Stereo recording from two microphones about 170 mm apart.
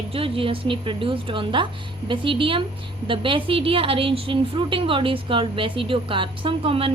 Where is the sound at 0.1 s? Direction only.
35° right (ahead or behind).